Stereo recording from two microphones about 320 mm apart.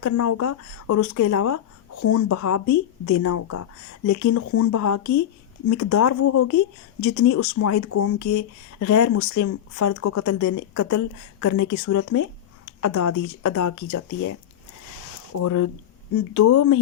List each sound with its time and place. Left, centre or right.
0.0 s speech: left